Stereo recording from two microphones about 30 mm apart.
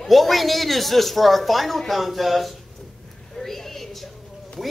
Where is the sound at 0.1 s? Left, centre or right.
Centre.